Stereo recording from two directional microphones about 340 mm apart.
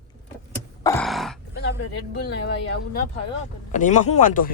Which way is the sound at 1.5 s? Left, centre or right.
Left.